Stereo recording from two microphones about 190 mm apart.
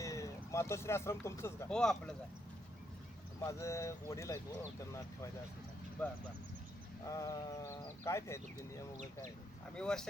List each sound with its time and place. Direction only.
0.0 s speech: 15° left (ahead or behind)
1.7 s speech: 5° left (ahead or behind)
3.4 s speech: 15° left (ahead or behind)
7.0 s speech: 15° left (ahead or behind)
9.7 s speech: 5° left (ahead or behind)